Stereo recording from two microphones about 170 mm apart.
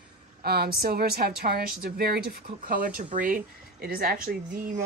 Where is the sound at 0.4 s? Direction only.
65° right (ahead or behind).